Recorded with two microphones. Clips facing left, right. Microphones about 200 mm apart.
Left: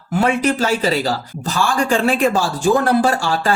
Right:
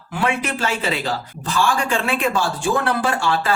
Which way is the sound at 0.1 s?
40° left (ahead or behind).